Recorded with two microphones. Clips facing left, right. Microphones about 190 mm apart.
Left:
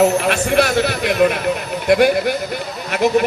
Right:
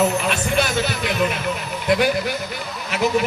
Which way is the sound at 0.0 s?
70° left (ahead or behind).